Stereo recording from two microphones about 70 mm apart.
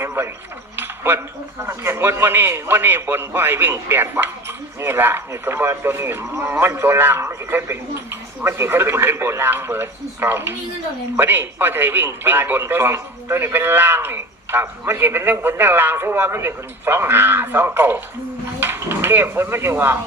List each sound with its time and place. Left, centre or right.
0.0 s cutlery: right
0.8 s a sound: right
1.6 s a man's voice: right